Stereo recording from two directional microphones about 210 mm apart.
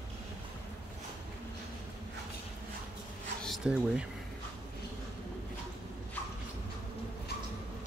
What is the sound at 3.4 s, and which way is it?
Speech, centre (ahead or behind).